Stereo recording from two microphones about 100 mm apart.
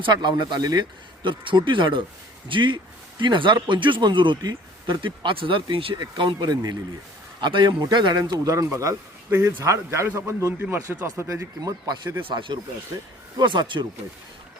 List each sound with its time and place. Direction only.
0.0 s speech: 50° right (ahead or behind)
1.2 s speech: 55° right (ahead or behind); by 11.9 s 35° right (ahead or behind)
12.2 s speech: 55° right (ahead or behind)